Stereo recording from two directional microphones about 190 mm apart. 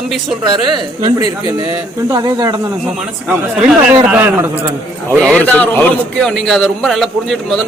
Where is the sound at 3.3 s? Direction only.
5° right (ahead or behind).